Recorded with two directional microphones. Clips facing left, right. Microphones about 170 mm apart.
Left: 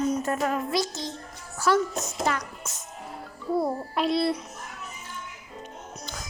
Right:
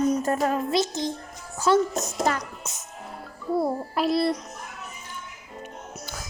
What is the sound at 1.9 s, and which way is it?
Speech, 40° right (ahead or behind).